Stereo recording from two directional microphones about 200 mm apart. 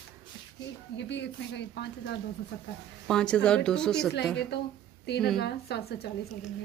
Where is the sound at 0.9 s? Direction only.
60° left (ahead or behind).